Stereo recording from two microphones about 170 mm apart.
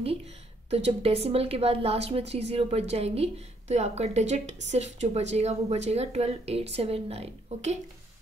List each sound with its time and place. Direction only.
0.7 s a woman's voice: 35° right (ahead or behind)